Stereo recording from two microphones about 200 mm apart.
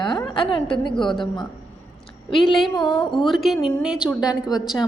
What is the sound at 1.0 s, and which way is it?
Speech, centre (ahead or behind).